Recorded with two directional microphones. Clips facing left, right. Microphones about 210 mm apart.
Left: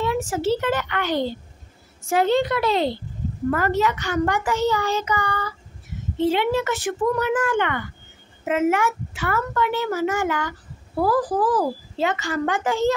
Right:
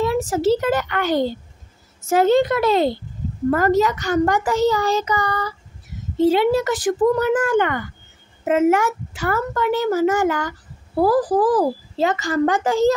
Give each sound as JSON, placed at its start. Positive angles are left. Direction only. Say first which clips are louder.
{"t": 0.0, "sound": "a child's voice", "louder": "right 4 dB", "side_deg": -35}